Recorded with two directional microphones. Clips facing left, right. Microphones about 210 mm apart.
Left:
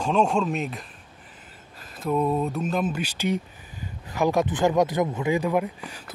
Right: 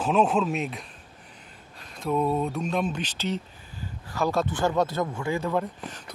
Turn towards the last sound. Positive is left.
turn(degrees=10)  # may be behind; listen again after turning